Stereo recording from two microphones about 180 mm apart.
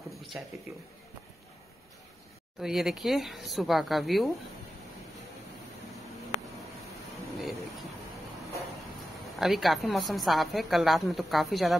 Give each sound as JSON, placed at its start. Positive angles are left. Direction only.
{"t": 0.3, "sound": "speech", "side_deg": -5}
{"t": 2.6, "sound": "a woman's voice", "side_deg": 0}
{"t": 9.4, "sound": "a woman's voice", "side_deg": 0}